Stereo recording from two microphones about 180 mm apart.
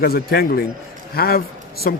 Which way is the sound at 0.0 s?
60° left (ahead or behind).